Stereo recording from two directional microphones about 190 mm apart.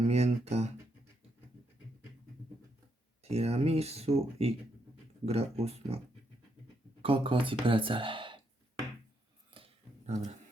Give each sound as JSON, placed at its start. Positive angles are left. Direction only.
{"t": 0.1, "sound": "speech", "side_deg": -35}
{"t": 3.2, "sound": "speech", "side_deg": -35}
{"t": 7.0, "sound": "speech", "side_deg": -30}
{"t": 9.6, "sound": "a sound", "side_deg": -35}